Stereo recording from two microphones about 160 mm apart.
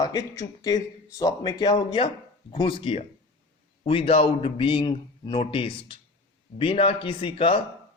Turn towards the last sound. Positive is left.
turn(degrees=35)  # may be behind; listen again after turning